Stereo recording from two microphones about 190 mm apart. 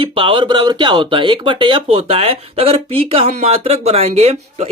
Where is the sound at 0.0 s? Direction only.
25° right (ahead or behind).